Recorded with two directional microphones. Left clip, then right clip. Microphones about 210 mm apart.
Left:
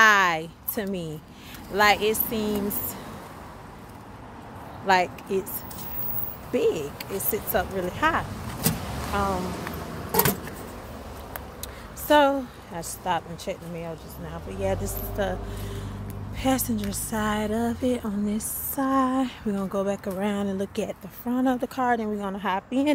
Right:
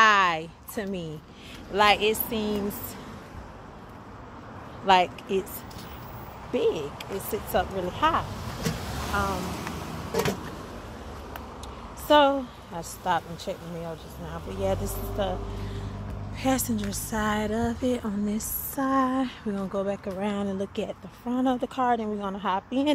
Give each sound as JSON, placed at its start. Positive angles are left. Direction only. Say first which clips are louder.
{"t": 0.0, "sound": "a sound", "louder": "left 2 dB", "side_deg": 5}
{"t": 1.7, "sound": "a woman's voice", "louder": "left 1 dB", "side_deg": -5}
{"t": 4.8, "sound": "speech", "louder": "right 1 dB", "side_deg": -10}
{"t": 6.5, "sound": "a woman's voice", "louder": "left 2 dB", "side_deg": 0}
{"t": 8.6, "sound": "vehicle", "louder": "left 3 dB", "side_deg": 50}
{"t": 10.1, "sound": "a sound", "louder": "left 3 dB", "side_deg": 50}
{"t": 12.1, "sound": "a woman's voice", "louder": "even", "side_deg": -5}
{"t": 14.6, "sound": "a woman's voice", "louder": "even", "side_deg": -5}
{"t": 16.3, "sound": "a woman's voice", "louder": "left 1 dB", "side_deg": 0}